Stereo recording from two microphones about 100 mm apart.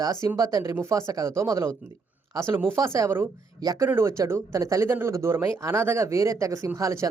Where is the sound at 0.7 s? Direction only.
30° right (ahead or behind).